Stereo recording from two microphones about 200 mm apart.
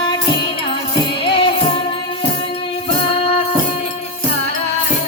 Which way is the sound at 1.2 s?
25° left (ahead or behind).